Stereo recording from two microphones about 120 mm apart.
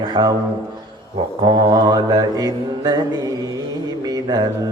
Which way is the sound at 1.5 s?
35° right (ahead or behind).